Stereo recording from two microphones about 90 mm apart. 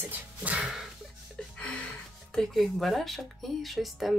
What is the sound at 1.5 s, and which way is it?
Music, 15° left (ahead or behind).